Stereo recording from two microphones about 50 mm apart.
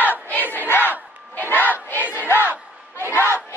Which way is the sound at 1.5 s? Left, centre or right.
Left.